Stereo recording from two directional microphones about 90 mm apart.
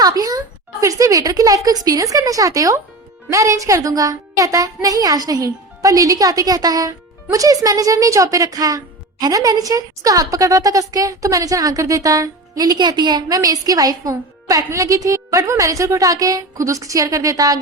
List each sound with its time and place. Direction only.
0.0 s a woman's voice: 45° right (ahead or behind)
13.2 s a woman's voice: 40° right (ahead or behind)